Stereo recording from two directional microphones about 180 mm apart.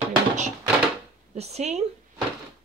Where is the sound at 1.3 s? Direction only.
35° right (ahead or behind).